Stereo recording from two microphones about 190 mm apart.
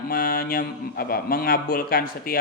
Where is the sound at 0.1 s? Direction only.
50° left (ahead or behind).